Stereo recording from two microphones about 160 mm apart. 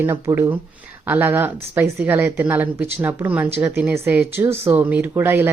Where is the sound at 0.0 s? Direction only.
15° right (ahead or behind).